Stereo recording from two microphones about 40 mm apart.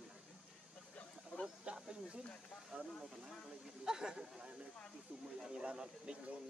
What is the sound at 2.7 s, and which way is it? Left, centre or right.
Speech, right.